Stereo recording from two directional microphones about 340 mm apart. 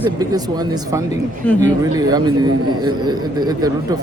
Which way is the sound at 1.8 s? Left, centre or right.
Centre.